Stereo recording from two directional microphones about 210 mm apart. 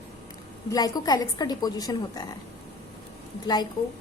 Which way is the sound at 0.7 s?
20° left (ahead or behind).